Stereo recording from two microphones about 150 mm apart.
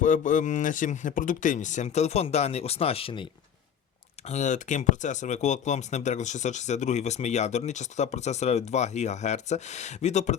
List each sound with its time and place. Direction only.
0.0 s speech: 60° left (ahead or behind); by 3.2 s 35° left (ahead or behind)
4.3 s speech: 55° left (ahead or behind)